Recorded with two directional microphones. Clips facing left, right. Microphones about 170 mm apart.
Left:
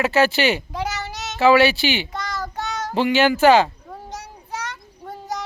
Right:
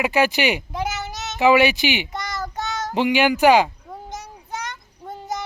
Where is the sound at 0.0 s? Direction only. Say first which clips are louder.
Left 1 dB; 15° right (ahead or behind).